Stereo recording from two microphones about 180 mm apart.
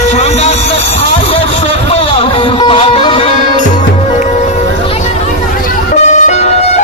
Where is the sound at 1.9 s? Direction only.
30° left (ahead or behind).